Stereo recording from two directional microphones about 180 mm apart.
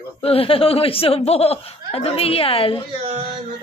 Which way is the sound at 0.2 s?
30° left (ahead or behind).